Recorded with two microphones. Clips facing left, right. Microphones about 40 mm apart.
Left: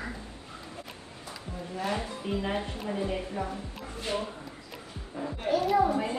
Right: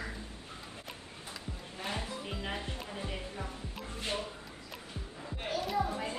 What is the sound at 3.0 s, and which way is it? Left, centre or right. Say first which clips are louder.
Speech: left 9 dB; left.